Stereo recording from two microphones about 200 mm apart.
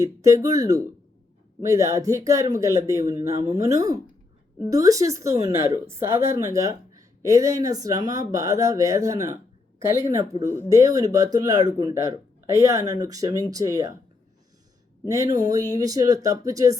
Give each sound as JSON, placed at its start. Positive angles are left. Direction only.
{"t": 0.0, "sound": "a woman's voice", "side_deg": -15}
{"t": 15.0, "sound": "a woman's voice", "side_deg": -15}